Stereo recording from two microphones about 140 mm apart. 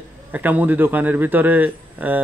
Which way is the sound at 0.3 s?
10° right (ahead or behind).